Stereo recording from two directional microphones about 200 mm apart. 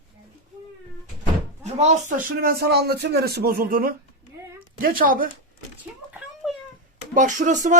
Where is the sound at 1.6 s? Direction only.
35° right (ahead or behind).